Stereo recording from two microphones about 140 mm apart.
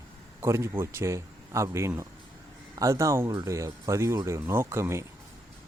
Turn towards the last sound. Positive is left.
turn(degrees=-20)  # may be behind; listen again after turning